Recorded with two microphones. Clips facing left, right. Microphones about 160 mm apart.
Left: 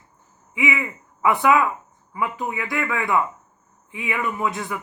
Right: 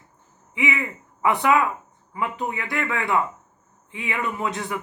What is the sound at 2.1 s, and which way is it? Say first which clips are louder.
Speech: left 1 dB; 30° right (ahead or behind).